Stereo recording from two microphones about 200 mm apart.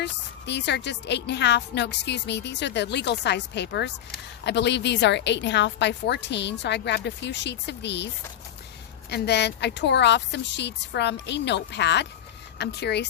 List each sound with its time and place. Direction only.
0.0 s a woman's voice: 60° left (ahead or behind)